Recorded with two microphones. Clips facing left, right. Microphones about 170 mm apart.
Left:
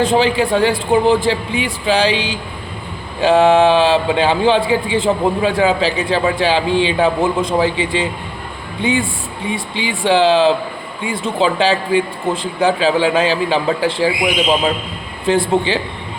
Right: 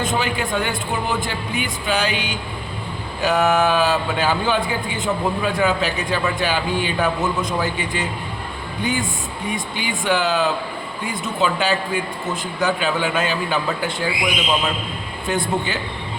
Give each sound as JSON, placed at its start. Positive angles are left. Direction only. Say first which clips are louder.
{"t": 0.0, "sound": "a man's voice", "louder": "left 8 dB", "side_deg": 30}